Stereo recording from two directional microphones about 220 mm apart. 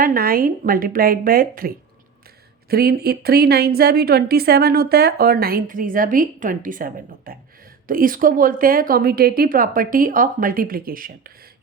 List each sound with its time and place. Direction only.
0.0 s a woman's voice: 40° right (ahead or behind)